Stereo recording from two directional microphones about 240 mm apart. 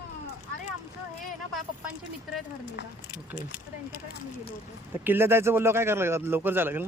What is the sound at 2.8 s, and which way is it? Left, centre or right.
Speech, left.